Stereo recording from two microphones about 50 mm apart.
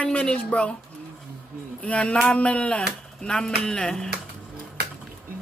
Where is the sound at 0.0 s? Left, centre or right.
Left.